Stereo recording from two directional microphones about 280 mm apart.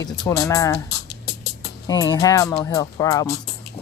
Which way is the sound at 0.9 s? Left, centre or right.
Left.